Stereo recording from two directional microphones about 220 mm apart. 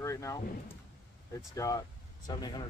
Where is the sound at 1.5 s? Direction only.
15° left (ahead or behind).